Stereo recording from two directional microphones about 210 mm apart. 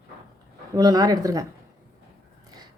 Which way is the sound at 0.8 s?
20° right (ahead or behind).